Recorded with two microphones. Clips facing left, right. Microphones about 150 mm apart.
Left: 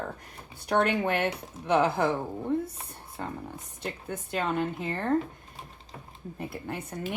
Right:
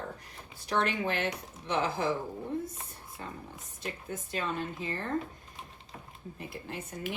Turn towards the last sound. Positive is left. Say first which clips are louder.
# left 4 dB
turn(degrees=55)  # may be behind; listen again after turning